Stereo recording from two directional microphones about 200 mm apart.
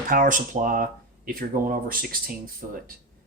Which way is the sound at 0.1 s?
40° right (ahead or behind).